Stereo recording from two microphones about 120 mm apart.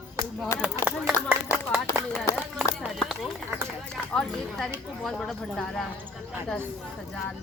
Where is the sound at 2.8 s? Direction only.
Centre (ahead or behind).